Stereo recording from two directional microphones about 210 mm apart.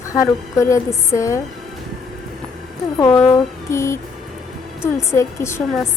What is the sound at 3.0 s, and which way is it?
Speech, 15° left (ahead or behind).